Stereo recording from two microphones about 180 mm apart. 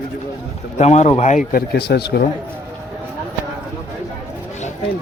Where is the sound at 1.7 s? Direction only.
65° left (ahead or behind).